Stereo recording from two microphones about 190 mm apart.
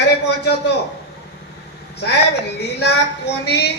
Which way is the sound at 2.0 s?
60° left (ahead or behind).